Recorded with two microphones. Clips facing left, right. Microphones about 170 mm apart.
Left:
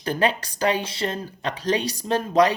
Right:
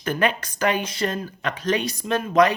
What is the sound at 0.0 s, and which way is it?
Speech, 35° left (ahead or behind).